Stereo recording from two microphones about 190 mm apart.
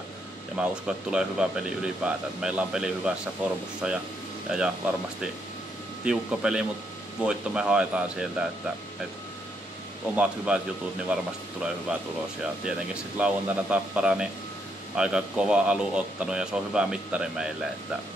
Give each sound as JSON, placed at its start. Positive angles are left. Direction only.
{"t": 0.6, "sound": "speech", "side_deg": -5}
{"t": 6.0, "sound": "speech", "side_deg": -5}
{"t": 10.1, "sound": "speech", "side_deg": -5}